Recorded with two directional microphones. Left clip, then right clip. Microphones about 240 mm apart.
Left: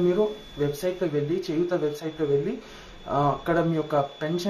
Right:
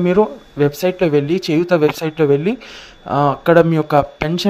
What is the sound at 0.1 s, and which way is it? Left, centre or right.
Speech, right.